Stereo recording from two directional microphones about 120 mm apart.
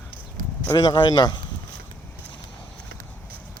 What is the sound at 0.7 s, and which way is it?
Speech, 40° left (ahead or behind).